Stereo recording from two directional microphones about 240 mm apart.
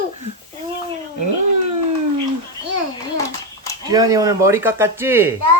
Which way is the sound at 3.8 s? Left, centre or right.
Centre.